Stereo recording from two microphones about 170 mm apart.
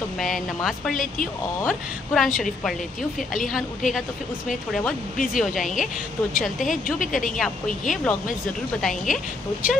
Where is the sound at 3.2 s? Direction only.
50° left (ahead or behind).